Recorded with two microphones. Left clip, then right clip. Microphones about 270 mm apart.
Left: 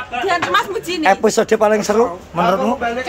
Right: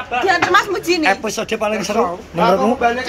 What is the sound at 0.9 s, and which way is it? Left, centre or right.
Speech, left.